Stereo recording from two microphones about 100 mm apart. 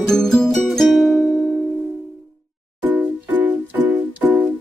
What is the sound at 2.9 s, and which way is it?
Music, 20° right (ahead or behind).